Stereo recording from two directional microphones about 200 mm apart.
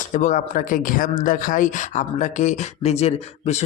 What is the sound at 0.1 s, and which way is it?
Speech, 35° left (ahead or behind).